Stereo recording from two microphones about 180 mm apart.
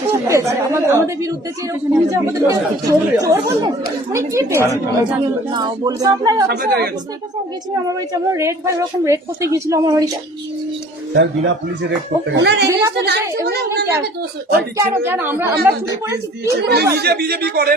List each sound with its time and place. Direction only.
0.1 s a woman's voice: 15° right (ahead or behind)
6.5 s speech: 60° right (ahead or behind)
7.9 s a woman's voice: 15° right (ahead or behind)
11.1 s speech: 90° right
12.3 s a woman's voice: 75° right (ahead or behind)
14.8 s a woman's voice: 10° right (ahead or behind)
16.6 s speech: 65° right (ahead or behind)